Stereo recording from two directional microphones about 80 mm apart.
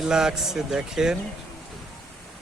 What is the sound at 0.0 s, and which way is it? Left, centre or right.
A man's voice, centre.